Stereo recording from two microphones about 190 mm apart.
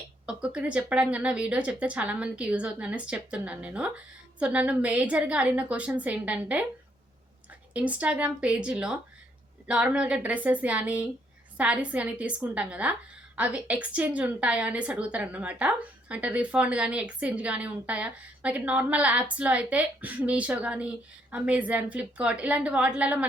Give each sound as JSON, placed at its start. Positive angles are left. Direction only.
{"t": 0.3, "sound": "a woman's voice", "side_deg": -5}
{"t": 7.7, "sound": "a woman's voice", "side_deg": -5}